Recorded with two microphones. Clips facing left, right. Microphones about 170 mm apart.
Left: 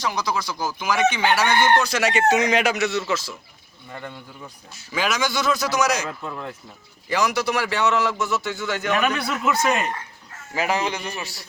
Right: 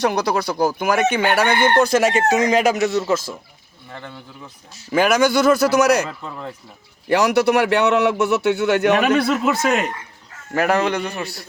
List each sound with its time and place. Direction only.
0.0 s a man's voice: 65° right (ahead or behind)
4.9 s a man's voice: 55° right (ahead or behind)
7.1 s a man's voice: 60° right (ahead or behind)
9.0 s speech: 35° right (ahead or behind)
10.5 s a man's voice: 60° right (ahead or behind)